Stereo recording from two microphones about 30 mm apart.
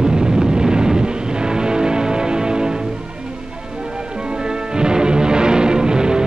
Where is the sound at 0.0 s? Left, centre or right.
Right.